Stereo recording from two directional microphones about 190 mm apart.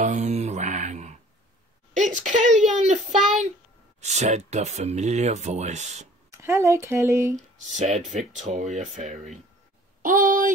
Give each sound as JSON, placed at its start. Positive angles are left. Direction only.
{"t": 0.0, "sound": "mantra", "side_deg": -40}
{"t": 2.0, "sound": "speech", "side_deg": -40}
{"t": 6.3, "sound": "speech", "side_deg": -15}
{"t": 7.7, "sound": "speech", "side_deg": -40}
{"t": 10.0, "sound": "a sound", "side_deg": -45}